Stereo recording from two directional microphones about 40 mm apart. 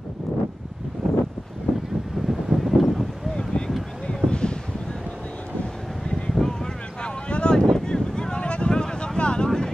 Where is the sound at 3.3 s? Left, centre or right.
Centre.